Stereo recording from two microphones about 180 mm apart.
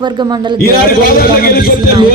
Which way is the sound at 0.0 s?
25° right (ahead or behind).